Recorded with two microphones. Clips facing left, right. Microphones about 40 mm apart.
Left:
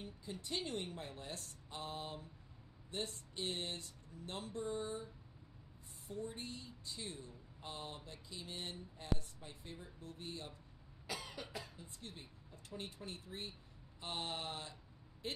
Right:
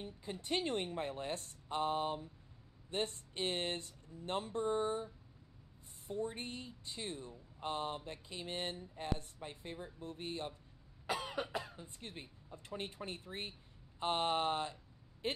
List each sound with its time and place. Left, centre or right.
0.0 s speech: right
11.1 s cough: right
11.5 s speech: right